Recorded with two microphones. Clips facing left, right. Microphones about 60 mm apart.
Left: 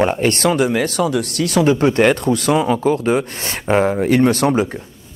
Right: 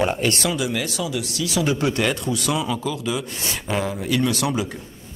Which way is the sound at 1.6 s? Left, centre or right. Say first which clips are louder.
Left 8 dB; left.